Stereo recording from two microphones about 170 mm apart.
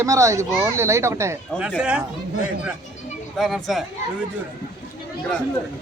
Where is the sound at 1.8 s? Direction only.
5° right (ahead or behind).